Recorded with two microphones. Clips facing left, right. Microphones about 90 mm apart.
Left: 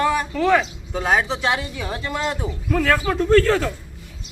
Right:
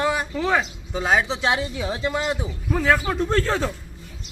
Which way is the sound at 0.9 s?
45° left (ahead or behind).